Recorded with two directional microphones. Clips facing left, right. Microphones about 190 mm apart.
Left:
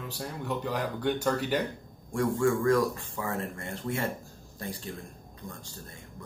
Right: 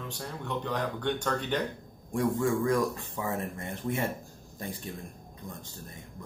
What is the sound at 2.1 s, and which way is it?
A man's voice, 15° right (ahead or behind).